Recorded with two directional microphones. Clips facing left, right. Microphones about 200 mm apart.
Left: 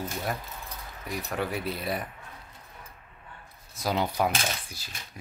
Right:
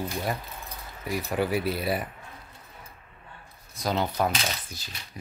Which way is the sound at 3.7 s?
10° left (ahead or behind).